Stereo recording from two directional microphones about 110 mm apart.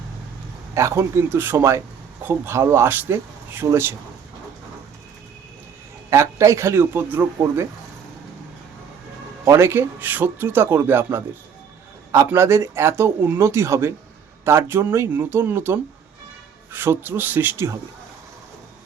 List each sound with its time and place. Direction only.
0.7 s a man's voice: 25° right (ahead or behind)
6.1 s a man's voice: 25° right (ahead or behind)
9.4 s a man's voice: 25° right (ahead or behind)